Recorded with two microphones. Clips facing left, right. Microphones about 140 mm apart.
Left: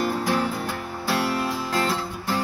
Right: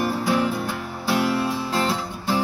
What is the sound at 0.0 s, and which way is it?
Music, 20° right (ahead or behind).